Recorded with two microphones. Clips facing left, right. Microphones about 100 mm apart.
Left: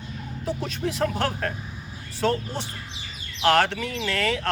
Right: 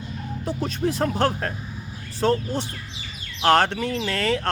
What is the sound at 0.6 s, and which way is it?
Speech, 35° right (ahead or behind).